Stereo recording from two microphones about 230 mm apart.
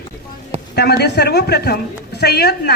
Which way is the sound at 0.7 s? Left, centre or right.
Left.